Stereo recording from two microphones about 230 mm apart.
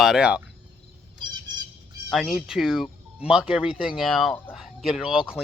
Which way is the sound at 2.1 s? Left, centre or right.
Centre.